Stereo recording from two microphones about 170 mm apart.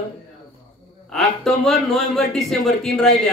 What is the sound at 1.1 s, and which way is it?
Speech, centre (ahead or behind).